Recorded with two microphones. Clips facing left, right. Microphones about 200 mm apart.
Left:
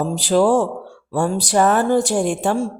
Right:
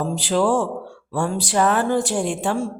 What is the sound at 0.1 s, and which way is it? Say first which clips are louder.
Speech: left 5 dB; 40° left (ahead or behind).